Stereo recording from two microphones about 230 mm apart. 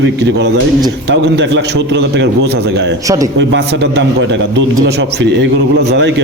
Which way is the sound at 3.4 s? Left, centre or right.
Right.